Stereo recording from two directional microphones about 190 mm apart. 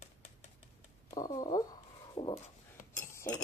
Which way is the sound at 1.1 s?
20° left (ahead or behind).